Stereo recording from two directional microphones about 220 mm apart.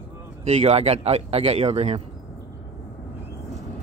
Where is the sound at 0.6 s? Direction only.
30° right (ahead or behind).